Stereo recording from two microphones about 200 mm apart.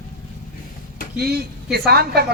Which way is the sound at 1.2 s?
50° right (ahead or behind).